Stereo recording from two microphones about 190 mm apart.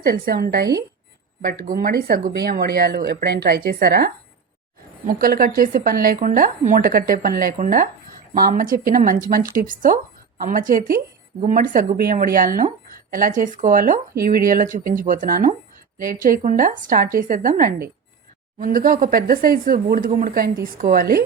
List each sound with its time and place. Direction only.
0.0 s speech: 50° right (ahead or behind)